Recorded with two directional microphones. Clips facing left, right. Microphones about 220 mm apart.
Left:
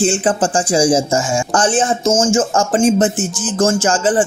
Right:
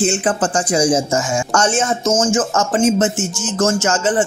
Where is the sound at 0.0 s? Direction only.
30° left (ahead or behind).